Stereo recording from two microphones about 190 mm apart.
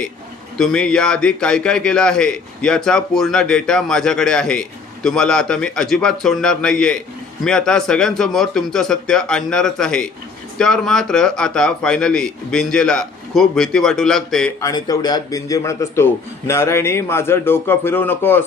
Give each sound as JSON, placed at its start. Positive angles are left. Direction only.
{"t": 0.6, "sound": "a man's voice", "side_deg": 5}
{"t": 14.6, "sound": "a man's voice", "side_deg": 20}